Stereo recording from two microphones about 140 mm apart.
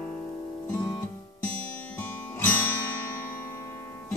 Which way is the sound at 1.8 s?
15° left (ahead or behind).